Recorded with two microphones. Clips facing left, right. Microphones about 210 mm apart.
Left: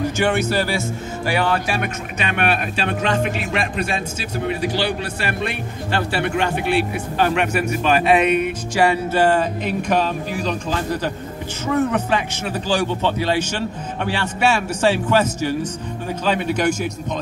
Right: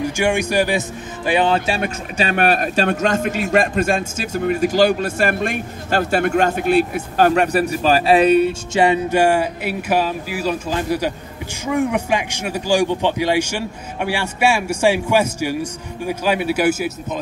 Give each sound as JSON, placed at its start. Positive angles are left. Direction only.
{"t": 0.0, "sound": "speech", "side_deg": -15}